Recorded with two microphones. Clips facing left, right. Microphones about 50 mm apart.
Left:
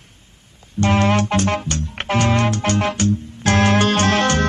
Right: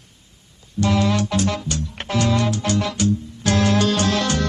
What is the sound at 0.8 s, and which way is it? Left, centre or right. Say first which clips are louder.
Music: left 3 dB; left.